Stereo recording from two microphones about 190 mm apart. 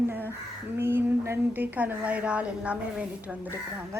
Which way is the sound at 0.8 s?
10° right (ahead or behind).